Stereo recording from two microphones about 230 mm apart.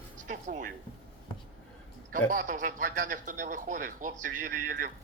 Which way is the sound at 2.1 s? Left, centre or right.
Right.